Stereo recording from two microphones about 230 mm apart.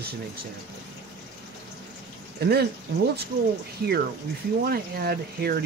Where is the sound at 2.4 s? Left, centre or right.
Right.